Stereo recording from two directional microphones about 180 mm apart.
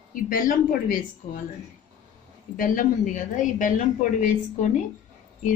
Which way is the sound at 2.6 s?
50° left (ahead or behind).